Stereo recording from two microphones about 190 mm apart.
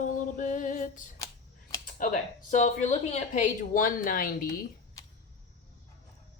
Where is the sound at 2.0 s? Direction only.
45° left (ahead or behind).